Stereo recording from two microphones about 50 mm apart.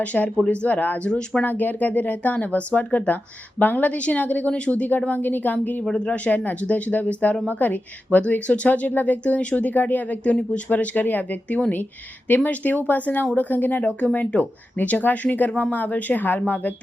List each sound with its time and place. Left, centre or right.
0.0 s speech: left
5.8 s speech: centre
6.1 s speech: left
9.2 s speech: left